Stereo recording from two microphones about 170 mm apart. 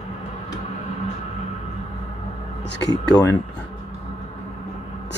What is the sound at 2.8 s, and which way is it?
Speech, 20° left (ahead or behind).